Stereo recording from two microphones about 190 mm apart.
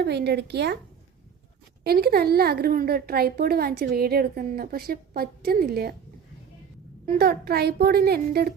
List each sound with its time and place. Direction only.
0.0 s a woman's voice: 60° right (ahead or behind)
1.8 s a woman's voice: 55° right (ahead or behind)
7.2 s a woman's voice: 55° right (ahead or behind)